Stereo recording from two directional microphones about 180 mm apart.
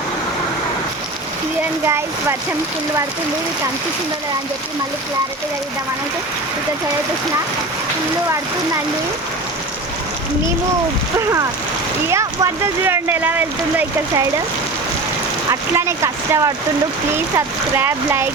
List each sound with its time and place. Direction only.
1.8 s speech: 15° right (ahead or behind)
11.2 s speech: 15° right (ahead or behind)
15.7 s speech: 15° right (ahead or behind)